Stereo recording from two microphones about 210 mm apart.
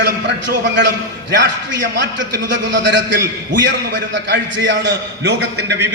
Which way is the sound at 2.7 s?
60° right (ahead or behind).